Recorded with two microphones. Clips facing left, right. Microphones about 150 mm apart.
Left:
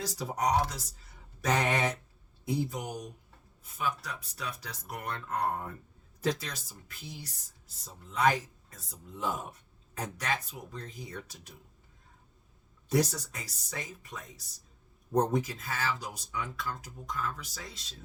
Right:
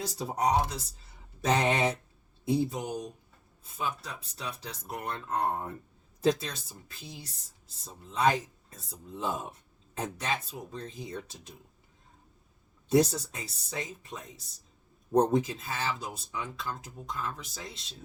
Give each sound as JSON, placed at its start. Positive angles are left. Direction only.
{"t": 0.0, "sound": "speech", "side_deg": -30}
{"t": 12.9, "sound": "speech", "side_deg": -25}